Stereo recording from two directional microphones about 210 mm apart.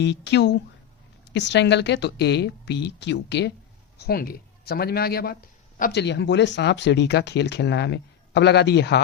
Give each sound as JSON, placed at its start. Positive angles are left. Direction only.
{"t": 0.0, "sound": "speech", "side_deg": 55}
{"t": 6.0, "sound": "speech", "side_deg": 55}